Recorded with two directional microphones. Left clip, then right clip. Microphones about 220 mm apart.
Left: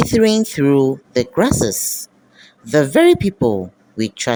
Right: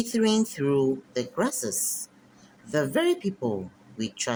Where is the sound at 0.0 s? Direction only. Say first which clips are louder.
Left 11 dB; 30° left (ahead or behind).